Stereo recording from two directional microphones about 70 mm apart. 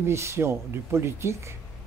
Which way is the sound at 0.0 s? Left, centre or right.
Right.